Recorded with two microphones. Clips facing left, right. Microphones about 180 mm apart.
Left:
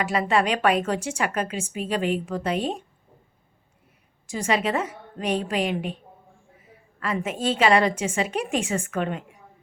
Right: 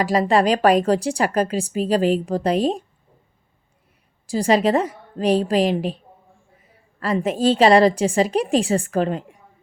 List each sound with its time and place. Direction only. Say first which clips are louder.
0.0 s a woman's voice: right 5 dB; 35° right (ahead or behind)
4.3 s a woman's voice: right 7 dB; 35° right (ahead or behind)
7.0 s a woman's voice: right 7 dB; 35° right (ahead or behind)